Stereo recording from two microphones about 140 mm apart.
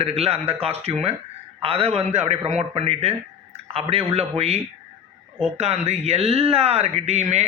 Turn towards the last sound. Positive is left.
turn(degrees=-50)  # may be behind; listen again after turning